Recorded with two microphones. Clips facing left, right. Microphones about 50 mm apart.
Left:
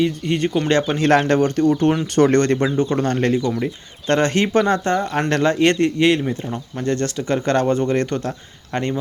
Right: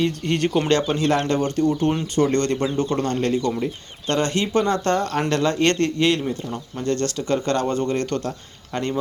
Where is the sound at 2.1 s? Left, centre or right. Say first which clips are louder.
Left 6 dB; left.